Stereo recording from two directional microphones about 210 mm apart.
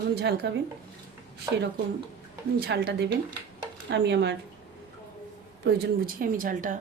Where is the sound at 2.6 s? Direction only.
55° right (ahead or behind).